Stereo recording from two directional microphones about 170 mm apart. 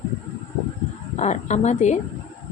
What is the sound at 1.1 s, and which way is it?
Speech, 40° left (ahead or behind).